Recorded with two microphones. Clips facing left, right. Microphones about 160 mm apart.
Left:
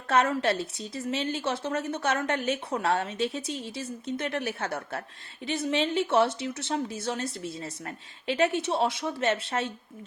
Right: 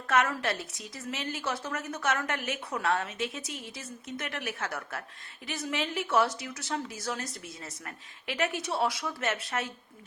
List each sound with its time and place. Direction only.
0.1 s a woman's voice: 30° left (ahead or behind)